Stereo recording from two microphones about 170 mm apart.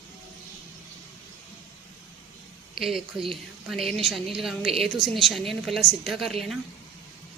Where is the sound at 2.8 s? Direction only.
Centre (ahead or behind).